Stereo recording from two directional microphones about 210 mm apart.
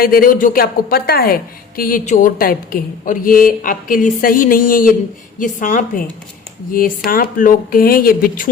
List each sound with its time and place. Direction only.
0.0 s a woman's voice: 45° left (ahead or behind)
3.0 s a sound: 40° left (ahead or behind)
6.7 s a woman's voice: 40° left (ahead or behind)